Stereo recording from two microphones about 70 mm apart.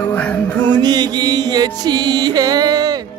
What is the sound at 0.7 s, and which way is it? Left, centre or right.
Music, right.